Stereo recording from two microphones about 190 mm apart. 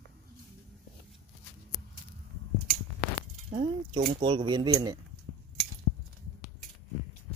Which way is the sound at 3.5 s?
25° right (ahead or behind).